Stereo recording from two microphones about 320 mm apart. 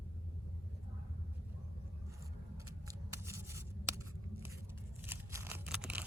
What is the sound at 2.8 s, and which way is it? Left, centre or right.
Scissors, centre.